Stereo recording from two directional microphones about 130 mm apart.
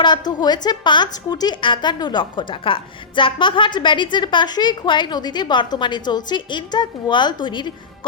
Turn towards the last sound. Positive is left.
turn(degrees=35)  # may be behind; listen again after turning